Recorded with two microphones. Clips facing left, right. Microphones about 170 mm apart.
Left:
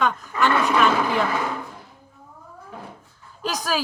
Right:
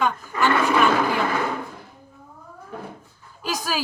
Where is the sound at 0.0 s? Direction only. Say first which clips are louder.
Even; 5° right (ahead or behind).